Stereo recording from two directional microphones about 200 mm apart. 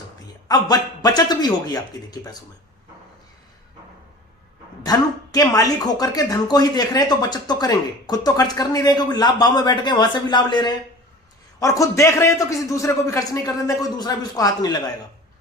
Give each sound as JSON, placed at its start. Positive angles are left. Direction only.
{"t": 0.4, "sound": "speech", "side_deg": 20}
{"t": 4.8, "sound": "a man's voice", "side_deg": 20}